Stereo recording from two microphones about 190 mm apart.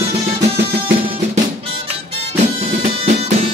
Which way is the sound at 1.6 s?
30° right (ahead or behind).